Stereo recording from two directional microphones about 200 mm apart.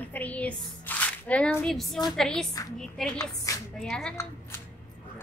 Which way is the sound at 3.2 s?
15° left (ahead or behind).